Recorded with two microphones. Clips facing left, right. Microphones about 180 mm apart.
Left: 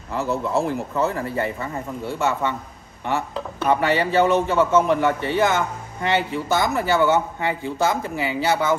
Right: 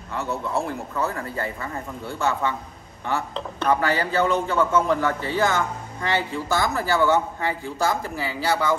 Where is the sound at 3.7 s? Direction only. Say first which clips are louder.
Left 3 dB; 25° left (ahead or behind).